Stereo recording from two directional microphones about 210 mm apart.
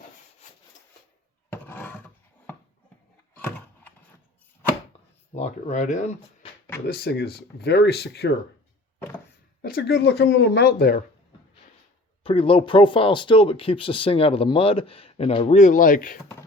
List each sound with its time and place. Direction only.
1.6 s roar: 10° left (ahead or behind)
3.3 s a sound: 10° left (ahead or behind)
5.3 s speech: 30° left (ahead or behind)
6.8 s speech: 50° left (ahead or behind)
9.6 s speech: 45° left (ahead or behind)
12.2 s speech: 25° left (ahead or behind)